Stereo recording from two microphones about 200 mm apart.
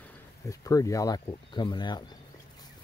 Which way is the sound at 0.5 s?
15° left (ahead or behind).